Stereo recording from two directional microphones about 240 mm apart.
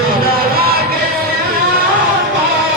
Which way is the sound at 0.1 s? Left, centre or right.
Right.